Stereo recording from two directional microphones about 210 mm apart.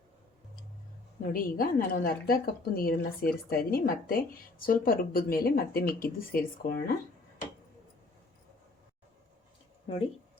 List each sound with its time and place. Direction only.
1.3 s a woman's voice: 40° left (ahead or behind)